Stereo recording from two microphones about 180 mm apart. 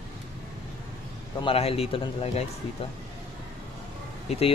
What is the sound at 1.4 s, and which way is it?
Speech, 30° left (ahead or behind).